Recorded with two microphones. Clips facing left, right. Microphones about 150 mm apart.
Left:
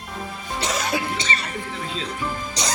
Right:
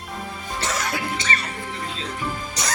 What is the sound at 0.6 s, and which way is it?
Music, 15° left (ahead or behind).